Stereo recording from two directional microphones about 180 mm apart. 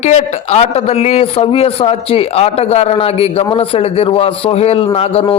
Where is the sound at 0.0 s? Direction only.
40° left (ahead or behind).